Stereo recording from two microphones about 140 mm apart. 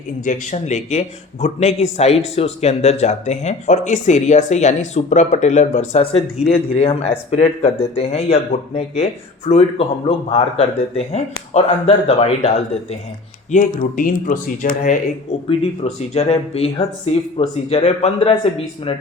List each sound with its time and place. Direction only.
0.3 s a man's voice: 55° left (ahead or behind)
13.7 s speech: 75° left (ahead or behind)
15.4 s speech: 50° left (ahead or behind)